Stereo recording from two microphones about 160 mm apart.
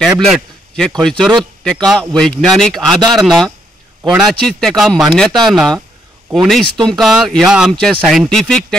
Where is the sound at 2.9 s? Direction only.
25° right (ahead or behind).